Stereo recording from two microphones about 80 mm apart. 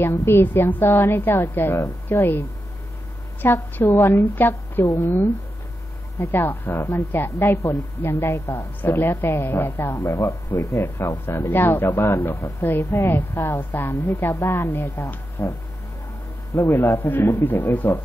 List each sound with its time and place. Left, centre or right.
0.0 s a woman's voice: left
3.4 s a woman's voice: left
8.3 s a woman's voice: left
8.8 s a woman's voice: left
10.6 s speech: left
11.0 s a woman's voice: left
13.4 s a woman's voice: left
16.7 s a woman's voice: left